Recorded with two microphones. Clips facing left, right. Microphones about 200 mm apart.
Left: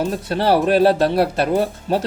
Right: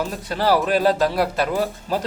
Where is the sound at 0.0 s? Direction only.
25° left (ahead or behind).